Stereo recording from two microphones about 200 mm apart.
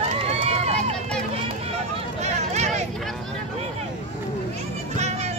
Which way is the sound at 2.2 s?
35° right (ahead or behind).